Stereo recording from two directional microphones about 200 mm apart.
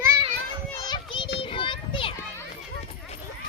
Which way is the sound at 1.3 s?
25° left (ahead or behind).